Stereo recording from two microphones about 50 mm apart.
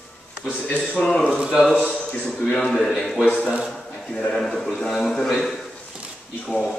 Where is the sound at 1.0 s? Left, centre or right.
Centre.